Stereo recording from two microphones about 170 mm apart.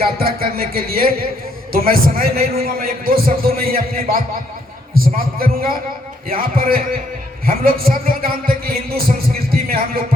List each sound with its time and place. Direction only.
0.0 s a man's voice: 60° right (ahead or behind)